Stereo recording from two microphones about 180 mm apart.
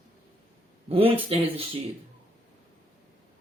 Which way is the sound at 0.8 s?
35° right (ahead or behind).